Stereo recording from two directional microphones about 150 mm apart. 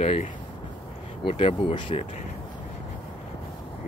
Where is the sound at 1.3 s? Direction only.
35° left (ahead or behind).